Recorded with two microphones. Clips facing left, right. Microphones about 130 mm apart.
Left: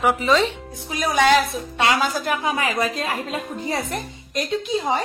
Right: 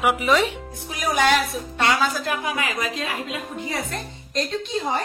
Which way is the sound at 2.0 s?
30° left (ahead or behind).